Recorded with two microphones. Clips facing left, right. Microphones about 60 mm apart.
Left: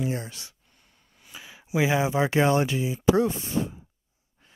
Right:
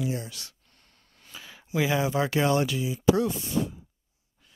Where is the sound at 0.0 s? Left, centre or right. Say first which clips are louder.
Left 1 dB; left.